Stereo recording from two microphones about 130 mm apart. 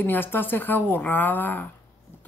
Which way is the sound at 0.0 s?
15° left (ahead or behind).